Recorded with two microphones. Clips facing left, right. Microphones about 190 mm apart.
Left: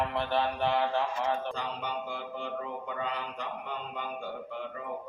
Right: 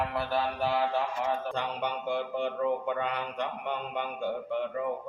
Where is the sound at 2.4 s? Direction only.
65° right (ahead or behind).